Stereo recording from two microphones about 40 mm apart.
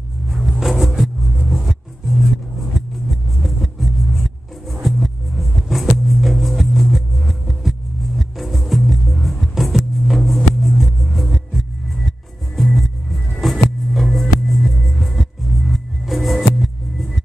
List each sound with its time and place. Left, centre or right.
0.4 s music: centre
0.7 s vehicle: centre
4.8 s music: centre